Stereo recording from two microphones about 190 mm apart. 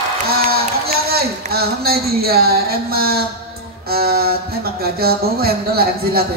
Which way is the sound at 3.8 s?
55° right (ahead or behind).